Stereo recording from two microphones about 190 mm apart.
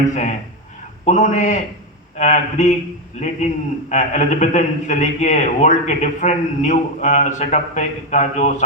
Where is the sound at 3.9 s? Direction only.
40° left (ahead or behind).